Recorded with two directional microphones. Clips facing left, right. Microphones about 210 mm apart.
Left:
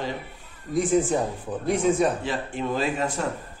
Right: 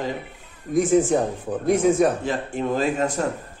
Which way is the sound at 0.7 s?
45° right (ahead or behind).